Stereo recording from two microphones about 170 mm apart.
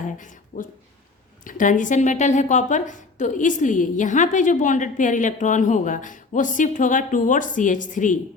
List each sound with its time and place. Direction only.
0.2 s a woman's voice: 50° left (ahead or behind)